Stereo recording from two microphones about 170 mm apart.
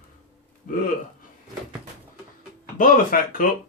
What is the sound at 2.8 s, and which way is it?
Speech, 55° left (ahead or behind).